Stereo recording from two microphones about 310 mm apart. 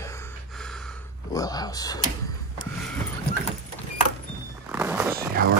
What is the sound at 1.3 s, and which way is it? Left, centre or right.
Speech, centre.